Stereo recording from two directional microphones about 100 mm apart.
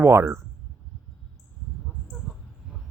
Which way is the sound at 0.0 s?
25° right (ahead or behind).